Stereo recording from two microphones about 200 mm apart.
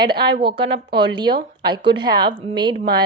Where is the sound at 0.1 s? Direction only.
55° right (ahead or behind).